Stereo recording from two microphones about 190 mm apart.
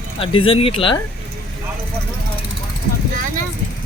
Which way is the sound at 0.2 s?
30° left (ahead or behind).